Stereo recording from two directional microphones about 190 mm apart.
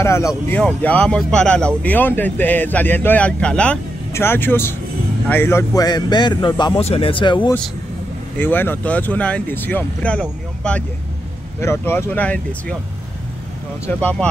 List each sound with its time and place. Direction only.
0.0 s a man's voice: 15° left (ahead or behind)
8.4 s speech: 10° left (ahead or behind)
13.8 s speech: 5° left (ahead or behind)